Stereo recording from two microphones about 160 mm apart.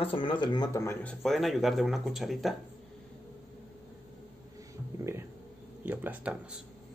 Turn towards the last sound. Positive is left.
turn(degrees=-10)  # may be behind; listen again after turning